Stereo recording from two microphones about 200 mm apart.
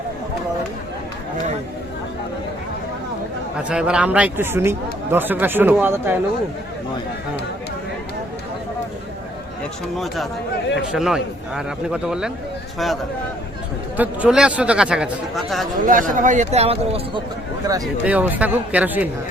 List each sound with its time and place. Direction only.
3.6 s speech: 5° right (ahead or behind)
10.9 s speech: centre (ahead or behind)
13.9 s speech: 5° right (ahead or behind)
15.8 s speech: 40° right (ahead or behind)
18.0 s speech: 5° right (ahead or behind)